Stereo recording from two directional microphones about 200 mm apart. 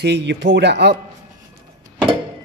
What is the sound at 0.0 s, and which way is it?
Speech, 60° right (ahead or behind).